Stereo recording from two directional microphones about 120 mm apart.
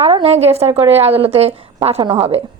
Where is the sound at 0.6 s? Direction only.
20° right (ahead or behind).